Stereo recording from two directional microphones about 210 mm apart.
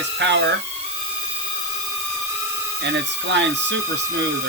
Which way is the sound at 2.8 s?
55° right (ahead or behind).